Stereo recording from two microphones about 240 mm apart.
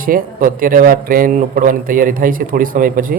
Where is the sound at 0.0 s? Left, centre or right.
Right.